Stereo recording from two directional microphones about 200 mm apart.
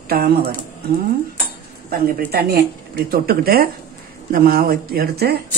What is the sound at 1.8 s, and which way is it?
Speech, 50° right (ahead or behind).